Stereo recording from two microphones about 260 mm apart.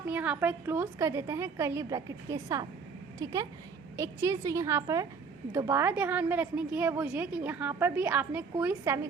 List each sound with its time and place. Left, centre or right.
0.1 s a woman's voice: centre